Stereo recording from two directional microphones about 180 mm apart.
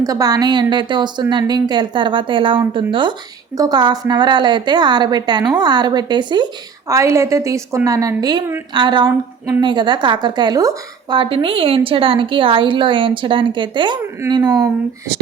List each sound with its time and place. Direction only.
0.0 s a woman's voice: 20° right (ahead or behind)